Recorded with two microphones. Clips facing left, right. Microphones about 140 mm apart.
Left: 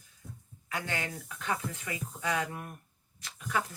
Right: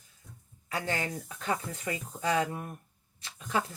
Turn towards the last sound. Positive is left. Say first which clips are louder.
# right 2 dB
turn(degrees=-30)  # may be behind; listen again after turning